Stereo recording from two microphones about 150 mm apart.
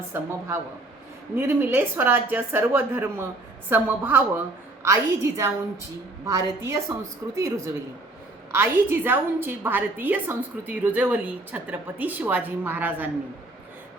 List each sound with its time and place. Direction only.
0.1 s a woman's voice: 15° right (ahead or behind)